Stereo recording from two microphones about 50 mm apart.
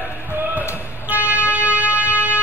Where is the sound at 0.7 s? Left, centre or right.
Right.